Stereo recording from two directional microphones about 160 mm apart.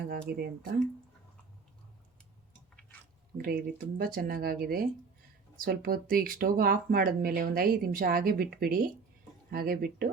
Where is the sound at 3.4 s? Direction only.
75° right (ahead or behind).